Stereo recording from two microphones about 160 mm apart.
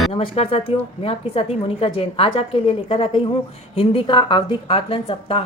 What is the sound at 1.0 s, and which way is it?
A woman's voice, 35° left (ahead or behind).